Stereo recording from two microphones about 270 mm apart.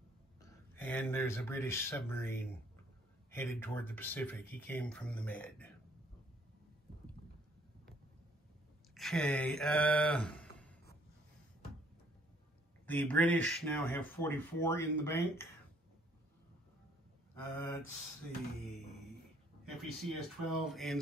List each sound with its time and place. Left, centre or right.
0.4 s speech: centre
8.9 s speech: centre
9.6 s mantra: centre
12.8 s speech: centre
17.4 s speech: centre
19.6 s speech: centre